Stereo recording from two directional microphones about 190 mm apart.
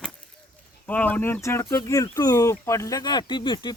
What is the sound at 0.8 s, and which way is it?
Speech, 10° left (ahead or behind).